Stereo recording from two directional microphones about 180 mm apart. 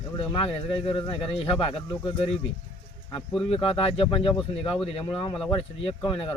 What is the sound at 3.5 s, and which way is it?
Speech, 30° left (ahead or behind).